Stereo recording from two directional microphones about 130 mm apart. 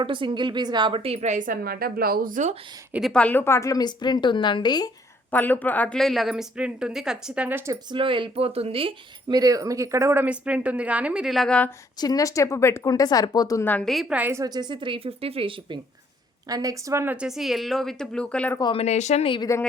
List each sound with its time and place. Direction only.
0.0 s a woman's voice: 40° right (ahead or behind); by 2.6 s 75° right (ahead or behind)
3.1 s a woman's voice: 10° left (ahead or behind); by 4.9 s 35° left (ahead or behind)
5.3 s a woman's voice: 15° left (ahead or behind); by 7.8 s 20° right (ahead or behind)
7.9 s speech: 40° right (ahead or behind)
9.3 s speech: 30° right (ahead or behind); by 11.7 s 5° left (ahead or behind)
11.9 s speech: 30° left (ahead or behind)
13.7 s a woman's voice: 10° left (ahead or behind)
13.9 s a woman's voice: centre (ahead or behind)
14.2 s speech: 15° right (ahead or behind)
14.4 s a woman's voice: 30° right (ahead or behind)
16.5 s a woman's voice: 30° right (ahead or behind)
17.2 s a woman's voice: 5° right (ahead or behind)
18.6 s speech: 50° left (ahead or behind)
19.2 s a woman's voice: 40° left (ahead or behind)